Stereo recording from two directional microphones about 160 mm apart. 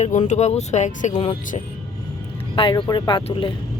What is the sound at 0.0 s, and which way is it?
Speech, 50° left (ahead or behind).